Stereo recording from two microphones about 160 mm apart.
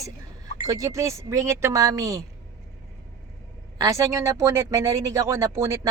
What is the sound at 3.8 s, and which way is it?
Speech, 20° right (ahead or behind).